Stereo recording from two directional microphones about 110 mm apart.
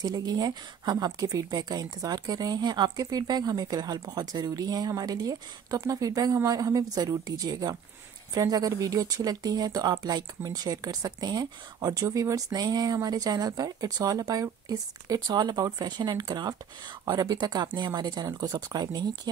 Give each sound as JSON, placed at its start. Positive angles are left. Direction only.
{"t": 0.0, "sound": "speech", "side_deg": -35}